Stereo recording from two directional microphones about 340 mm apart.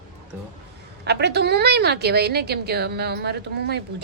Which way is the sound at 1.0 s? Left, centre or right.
Right.